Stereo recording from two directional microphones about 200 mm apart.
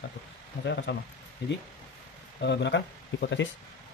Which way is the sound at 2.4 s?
60° left (ahead or behind).